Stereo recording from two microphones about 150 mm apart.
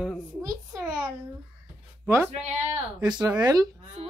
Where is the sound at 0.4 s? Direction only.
20° right (ahead or behind).